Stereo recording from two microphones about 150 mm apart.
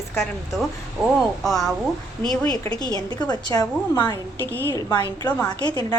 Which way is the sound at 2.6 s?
25° left (ahead or behind).